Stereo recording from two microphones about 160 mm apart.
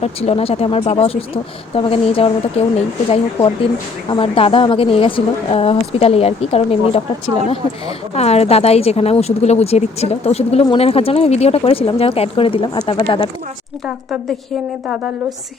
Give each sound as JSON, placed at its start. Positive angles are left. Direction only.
{"t": 0.0, "sound": "a woman's voice", "side_deg": 40}